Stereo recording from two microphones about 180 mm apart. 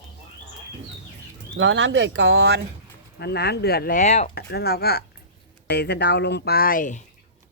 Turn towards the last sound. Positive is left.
turn(degrees=50)  # may be behind; listen again after turning